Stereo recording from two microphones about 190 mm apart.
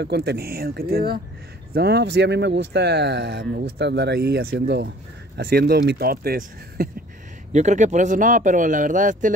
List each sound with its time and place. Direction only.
0.0 s speech: 60° right (ahead or behind)
7.5 s speech: 40° right (ahead or behind)